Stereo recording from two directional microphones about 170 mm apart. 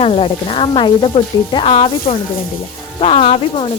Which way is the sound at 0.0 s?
35° left (ahead or behind).